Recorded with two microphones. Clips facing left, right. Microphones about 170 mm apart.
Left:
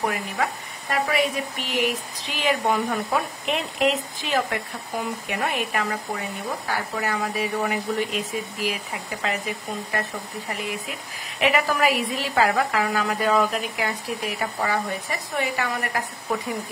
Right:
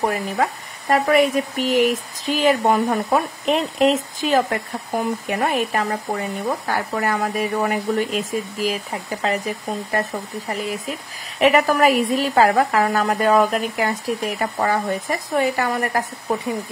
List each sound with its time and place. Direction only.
0.0 s a woman's voice: 40° right (ahead or behind)
10.5 s a woman's voice: 40° right (ahead or behind)